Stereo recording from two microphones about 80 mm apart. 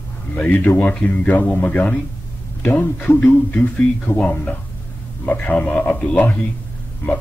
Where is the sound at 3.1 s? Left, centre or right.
Centre.